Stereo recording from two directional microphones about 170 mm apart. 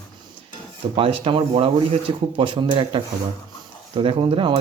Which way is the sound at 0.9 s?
35° right (ahead or behind).